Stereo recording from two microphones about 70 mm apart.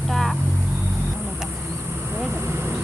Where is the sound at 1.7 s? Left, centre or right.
Right.